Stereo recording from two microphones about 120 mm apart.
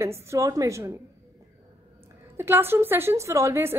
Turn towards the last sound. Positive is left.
turn(degrees=-20)  # may be behind; listen again after turning